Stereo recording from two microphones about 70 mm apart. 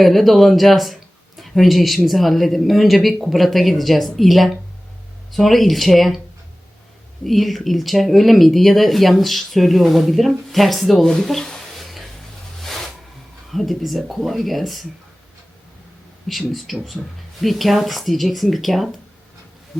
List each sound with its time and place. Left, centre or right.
0.0 s speech: centre
7.3 s speech: centre
12.6 s a sound: centre
13.5 s speech: centre
16.3 s speech: centre